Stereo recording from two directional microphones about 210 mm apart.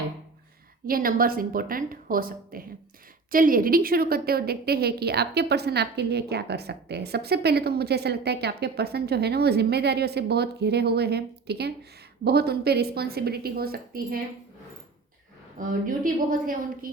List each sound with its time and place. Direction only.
0.9 s a woman's voice: 45° right (ahead or behind)
15.5 s a woman's voice: 40° right (ahead or behind)